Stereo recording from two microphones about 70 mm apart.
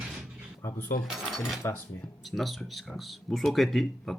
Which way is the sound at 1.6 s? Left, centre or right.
Left.